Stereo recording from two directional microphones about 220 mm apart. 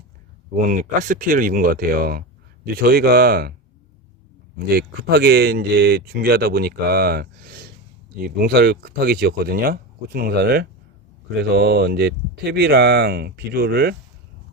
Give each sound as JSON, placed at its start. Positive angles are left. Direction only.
{"t": 0.5, "sound": "speech", "side_deg": -35}
{"t": 4.5, "sound": "speech", "side_deg": -45}